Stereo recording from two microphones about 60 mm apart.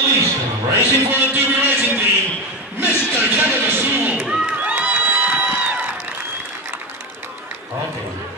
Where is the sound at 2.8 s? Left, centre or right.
Right.